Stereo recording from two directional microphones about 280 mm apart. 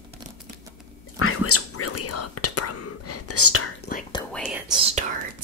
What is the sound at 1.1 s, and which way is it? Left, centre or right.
Whispering, left.